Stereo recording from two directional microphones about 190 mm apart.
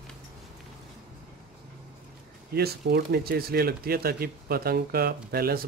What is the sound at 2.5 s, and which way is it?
Speech, 60° right (ahead or behind).